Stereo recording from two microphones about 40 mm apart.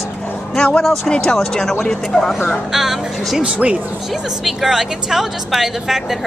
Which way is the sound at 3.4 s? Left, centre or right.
Right.